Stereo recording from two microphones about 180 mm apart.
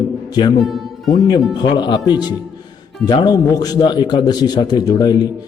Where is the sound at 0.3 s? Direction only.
20° left (ahead or behind).